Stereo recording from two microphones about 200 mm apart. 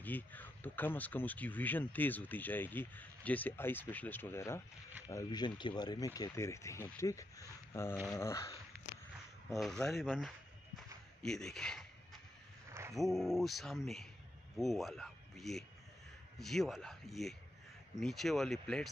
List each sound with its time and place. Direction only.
0.0 s speech: 10° left (ahead or behind)
9.5 s speech: centre (ahead or behind)
11.2 s a sound: centre (ahead or behind)
12.9 s speech: centre (ahead or behind)